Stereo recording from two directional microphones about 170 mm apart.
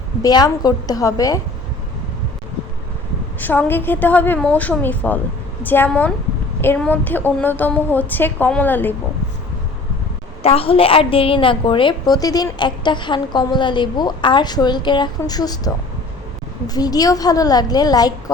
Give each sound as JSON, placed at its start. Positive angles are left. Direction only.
{"t": 0.2, "sound": "a woman's voice", "side_deg": 25}
{"t": 3.4, "sound": "a woman's voice", "side_deg": 10}
{"t": 10.4, "sound": "a woman's voice", "side_deg": 35}